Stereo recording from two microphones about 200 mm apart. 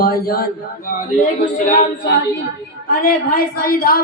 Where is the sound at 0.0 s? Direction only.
50° left (ahead or behind).